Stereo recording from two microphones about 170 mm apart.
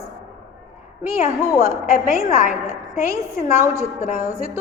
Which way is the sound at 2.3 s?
50° left (ahead or behind).